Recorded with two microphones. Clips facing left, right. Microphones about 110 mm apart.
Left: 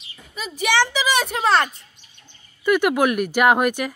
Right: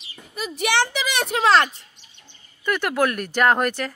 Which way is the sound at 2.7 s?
15° left (ahead or behind).